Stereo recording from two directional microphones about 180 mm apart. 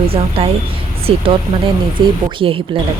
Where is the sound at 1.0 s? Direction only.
30° right (ahead or behind).